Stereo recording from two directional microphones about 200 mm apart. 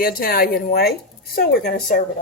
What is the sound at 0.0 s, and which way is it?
Speech, 45° left (ahead or behind).